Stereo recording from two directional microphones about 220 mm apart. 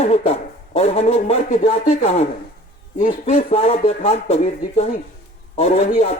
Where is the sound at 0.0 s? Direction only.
30° left (ahead or behind).